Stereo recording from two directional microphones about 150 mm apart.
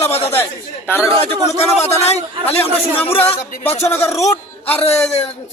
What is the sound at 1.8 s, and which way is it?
Speech, 45° left (ahead or behind).